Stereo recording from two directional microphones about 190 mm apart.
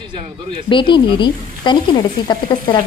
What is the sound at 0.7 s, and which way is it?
A woman's voice, 25° left (ahead or behind).